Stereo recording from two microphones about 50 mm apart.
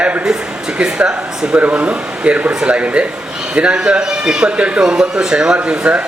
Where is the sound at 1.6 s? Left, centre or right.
Right.